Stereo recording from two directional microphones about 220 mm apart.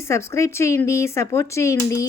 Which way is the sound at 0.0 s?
10° left (ahead or behind).